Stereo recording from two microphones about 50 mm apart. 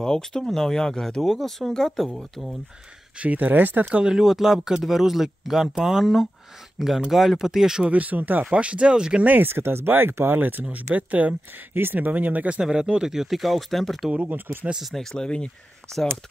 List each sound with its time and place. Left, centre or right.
0.0 s speech: centre
3.2 s speech: right
3.9 s speech: centre
4.2 s speech: centre
7.9 s speech: right
8.5 s speech: right
9.2 s speech: right
9.5 s speech: right
11.7 s speech: right
12.5 s speech: centre
14.1 s speech: right
15.0 s speech: centre